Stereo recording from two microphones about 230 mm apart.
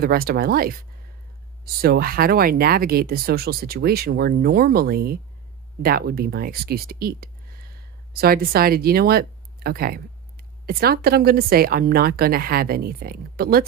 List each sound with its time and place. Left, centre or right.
0.0 s speech: right